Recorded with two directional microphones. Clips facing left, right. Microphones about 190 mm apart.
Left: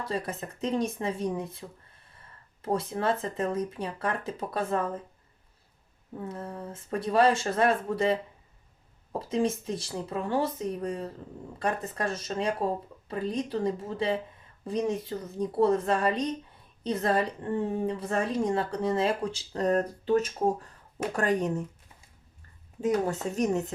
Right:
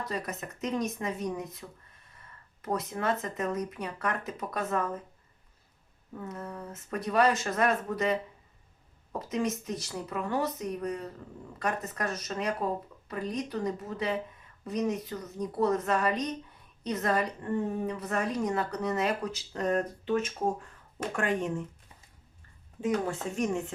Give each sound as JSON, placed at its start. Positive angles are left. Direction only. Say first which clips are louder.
{"t": 0.0, "sound": "a woman's voice", "louder": "left 3 dB", "side_deg": 30}
{"t": 6.1, "sound": "a woman's voice", "louder": "left 2 dB", "side_deg": 30}
{"t": 23.3, "sound": "a woman's voice", "louder": "left 3 dB", "side_deg": 40}